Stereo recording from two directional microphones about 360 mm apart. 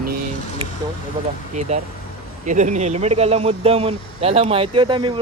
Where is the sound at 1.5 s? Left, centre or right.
Centre.